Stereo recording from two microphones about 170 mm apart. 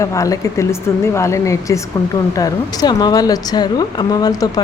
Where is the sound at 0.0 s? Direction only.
20° left (ahead or behind).